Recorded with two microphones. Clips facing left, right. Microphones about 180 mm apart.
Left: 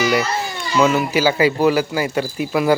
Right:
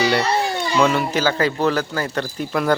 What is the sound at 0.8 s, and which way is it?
Speech, 5° left (ahead or behind).